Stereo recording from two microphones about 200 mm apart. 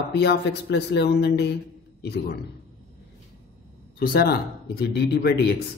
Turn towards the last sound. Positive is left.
turn(degrees=55)  # may be behind; listen again after turning